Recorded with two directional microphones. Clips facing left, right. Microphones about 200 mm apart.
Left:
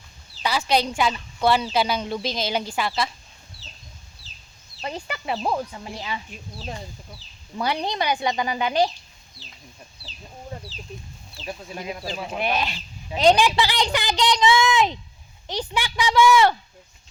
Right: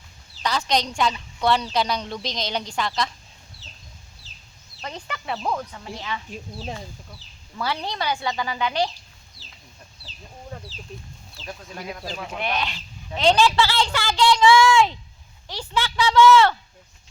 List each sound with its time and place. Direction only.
0.4 s a woman's voice: 10° left (ahead or behind)
5.1 s speech: 20° left (ahead or behind)
7.5 s speech: 20° left (ahead or behind)
9.4 s chicken: 15° left (ahead or behind)
11.3 s speech: 15° left (ahead or behind)